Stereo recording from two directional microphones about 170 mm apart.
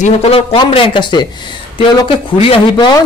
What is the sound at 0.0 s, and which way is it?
A man's voice, 35° left (ahead or behind).